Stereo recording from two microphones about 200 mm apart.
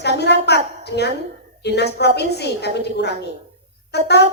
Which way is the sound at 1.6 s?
55° left (ahead or behind).